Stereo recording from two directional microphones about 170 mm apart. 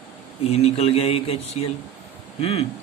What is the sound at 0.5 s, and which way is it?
Speech, 35° left (ahead or behind).